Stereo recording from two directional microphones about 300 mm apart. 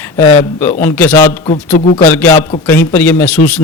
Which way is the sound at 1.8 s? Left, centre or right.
Left.